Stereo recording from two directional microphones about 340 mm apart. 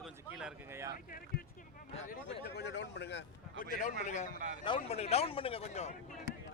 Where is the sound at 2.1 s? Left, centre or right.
Left.